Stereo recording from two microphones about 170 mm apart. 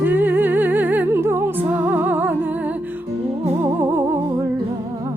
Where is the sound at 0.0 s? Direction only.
10° right (ahead or behind).